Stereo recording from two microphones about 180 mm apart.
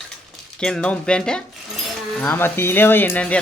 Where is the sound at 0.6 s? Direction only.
5° left (ahead or behind).